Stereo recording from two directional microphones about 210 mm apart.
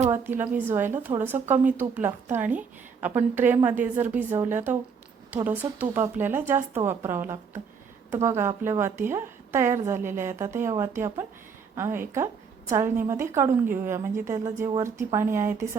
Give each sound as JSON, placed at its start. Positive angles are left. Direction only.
{"t": 0.1, "sound": "a woman's voice", "side_deg": -10}